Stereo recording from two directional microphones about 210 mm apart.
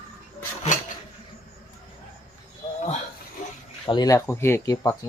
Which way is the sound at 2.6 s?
20° left (ahead or behind).